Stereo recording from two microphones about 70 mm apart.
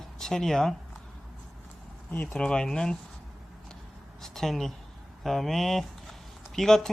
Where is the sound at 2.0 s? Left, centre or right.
Left.